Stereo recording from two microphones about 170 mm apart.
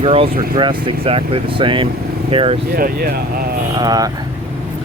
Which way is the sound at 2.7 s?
60° right (ahead or behind).